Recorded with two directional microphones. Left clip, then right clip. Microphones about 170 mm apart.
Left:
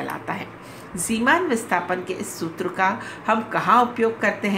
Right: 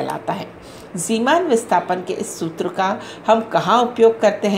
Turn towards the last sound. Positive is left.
turn(degrees=-15)  # may be behind; listen again after turning